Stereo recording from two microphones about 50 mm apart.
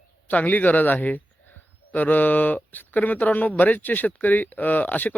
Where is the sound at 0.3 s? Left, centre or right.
Left.